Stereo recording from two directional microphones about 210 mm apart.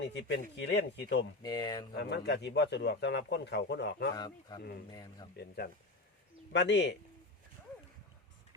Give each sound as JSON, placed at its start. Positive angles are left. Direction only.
{"t": 0.0, "sound": "speech", "side_deg": 55}
{"t": 1.4, "sound": "speech", "side_deg": 20}
{"t": 1.9, "sound": "a man's voice", "side_deg": 55}
{"t": 4.1, "sound": "speech", "side_deg": 20}
{"t": 5.4, "sound": "a man's voice", "side_deg": 45}